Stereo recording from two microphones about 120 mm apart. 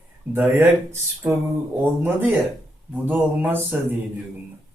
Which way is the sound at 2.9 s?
15° right (ahead or behind).